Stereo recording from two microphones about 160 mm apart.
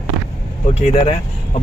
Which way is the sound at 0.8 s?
40° left (ahead or behind).